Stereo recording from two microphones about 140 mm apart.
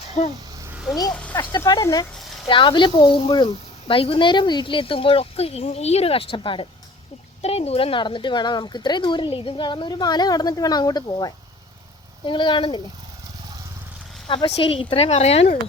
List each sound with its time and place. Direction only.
0.2 s speech: 50° left (ahead or behind)
1.1 s speech: 10° left (ahead or behind)
1.4 s speech: 30° left (ahead or behind)
14.3 s speech: 35° left (ahead or behind)